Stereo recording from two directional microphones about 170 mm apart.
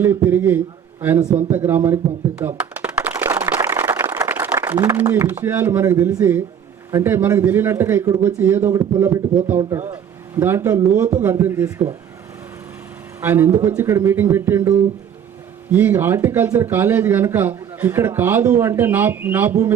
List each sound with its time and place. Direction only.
0.0 s speech: 15° right (ahead or behind)
2.4 s a sound: 10° right (ahead or behind)
6.9 s speech: 10° right (ahead or behind)
13.2 s speech: 15° right (ahead or behind)
15.7 s speech: 10° right (ahead or behind)